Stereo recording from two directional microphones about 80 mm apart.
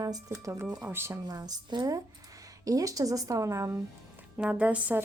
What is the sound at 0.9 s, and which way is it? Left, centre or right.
Speech, right.